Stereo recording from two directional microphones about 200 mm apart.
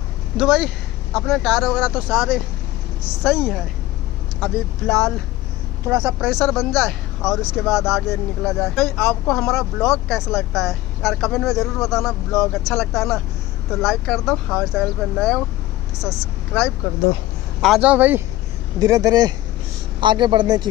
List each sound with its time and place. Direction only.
0.4 s a man's voice: 5° right (ahead or behind); by 20.6 s 20° right (ahead or behind)